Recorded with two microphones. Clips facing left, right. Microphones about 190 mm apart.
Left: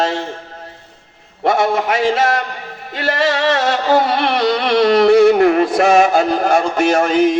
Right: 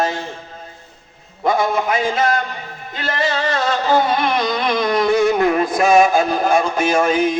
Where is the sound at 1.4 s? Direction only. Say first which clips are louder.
Left 2 dB; 75° left (ahead or behind).